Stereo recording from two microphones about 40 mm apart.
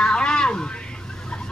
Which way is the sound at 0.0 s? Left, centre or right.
Left.